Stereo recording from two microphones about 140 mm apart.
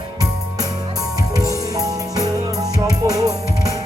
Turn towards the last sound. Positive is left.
turn(degrees=-25)  # may be behind; listen again after turning